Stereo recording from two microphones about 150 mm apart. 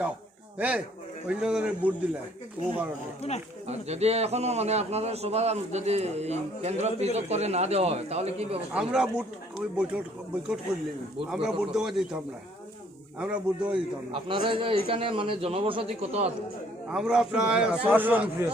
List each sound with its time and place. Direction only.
1.3 s a man's voice: 5° right (ahead or behind)
3.7 s a man's voice: 45° right (ahead or behind)
8.7 s speech: 5° right (ahead or behind)
11.3 s a man's voice: 5° right (ahead or behind)
14.1 s a man's voice: 35° right (ahead or behind)
16.9 s a man's voice: 5° right (ahead or behind)